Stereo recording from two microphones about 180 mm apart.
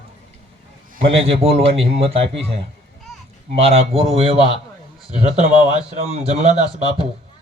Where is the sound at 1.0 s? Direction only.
35° right (ahead or behind).